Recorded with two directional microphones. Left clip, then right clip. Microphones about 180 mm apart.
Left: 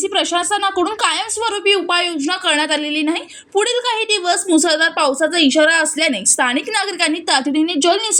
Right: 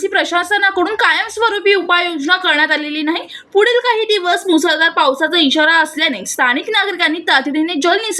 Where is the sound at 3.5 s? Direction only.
30° left (ahead or behind).